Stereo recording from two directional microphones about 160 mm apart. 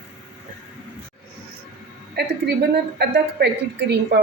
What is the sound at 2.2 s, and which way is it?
Speech, 80° right.